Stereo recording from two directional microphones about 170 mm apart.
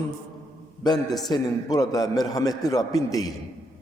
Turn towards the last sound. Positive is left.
turn(degrees=20)  # may be behind; listen again after turning